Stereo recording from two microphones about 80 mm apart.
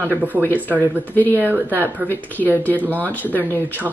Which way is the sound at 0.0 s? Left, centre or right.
Right.